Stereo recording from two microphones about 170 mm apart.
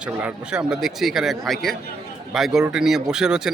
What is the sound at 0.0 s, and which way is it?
Speech, 5° right (ahead or behind).